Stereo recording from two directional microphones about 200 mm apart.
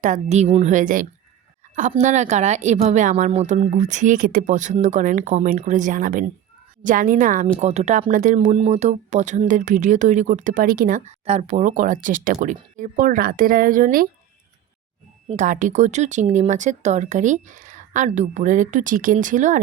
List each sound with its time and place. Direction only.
0.0 s speech: 35° right (ahead or behind)
15.3 s speech: 40° right (ahead or behind)